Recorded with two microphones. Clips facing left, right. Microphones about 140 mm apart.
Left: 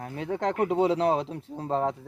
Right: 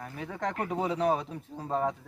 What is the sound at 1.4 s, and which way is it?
Speech, 30° left (ahead or behind).